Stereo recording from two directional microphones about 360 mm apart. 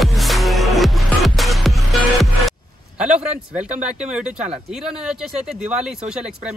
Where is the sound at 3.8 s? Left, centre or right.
Centre.